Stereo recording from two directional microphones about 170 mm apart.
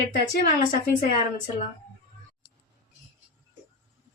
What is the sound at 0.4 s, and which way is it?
Speech, 50° left (ahead or behind).